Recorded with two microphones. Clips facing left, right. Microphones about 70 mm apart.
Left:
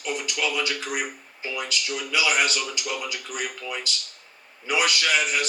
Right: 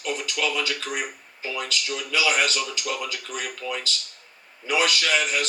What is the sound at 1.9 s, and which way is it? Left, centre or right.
A man's voice, centre.